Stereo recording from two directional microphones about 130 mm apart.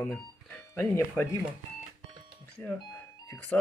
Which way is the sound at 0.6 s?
20° left (ahead or behind).